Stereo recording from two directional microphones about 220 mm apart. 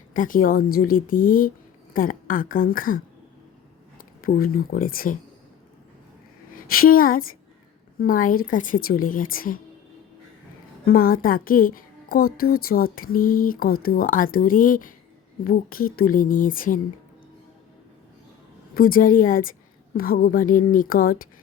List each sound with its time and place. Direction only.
0.1 s a woman's voice: 40° left (ahead or behind)
6.7 s a woman's voice: 40° left (ahead or behind)
10.8 s a woman's voice: 40° left (ahead or behind)
18.7 s a woman's voice: 40° left (ahead or behind)